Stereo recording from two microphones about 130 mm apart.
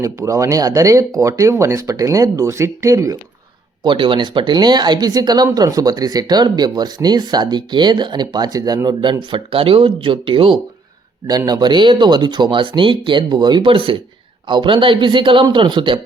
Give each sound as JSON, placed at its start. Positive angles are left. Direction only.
{"t": 0.0, "sound": "speech", "side_deg": -25}
{"t": 3.8, "sound": "speech", "side_deg": -40}
{"t": 11.3, "sound": "speech", "side_deg": -30}